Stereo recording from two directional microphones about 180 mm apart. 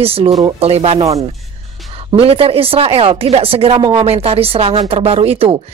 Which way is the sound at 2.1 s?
30° right (ahead or behind).